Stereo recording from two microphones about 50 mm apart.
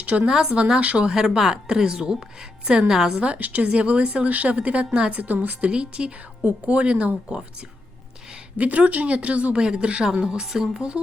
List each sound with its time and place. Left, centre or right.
0.0 s speech: right
0.3 s speech: centre
3.2 s speech: right
5.2 s speech: right
8.5 s speech: right